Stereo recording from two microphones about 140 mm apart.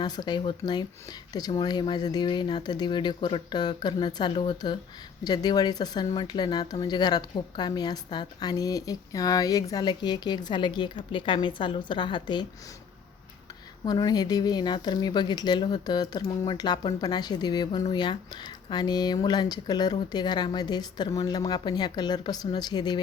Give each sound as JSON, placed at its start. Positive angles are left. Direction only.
{"t": 0.0, "sound": "speech", "side_deg": 30}
{"t": 13.8, "sound": "speech", "side_deg": 30}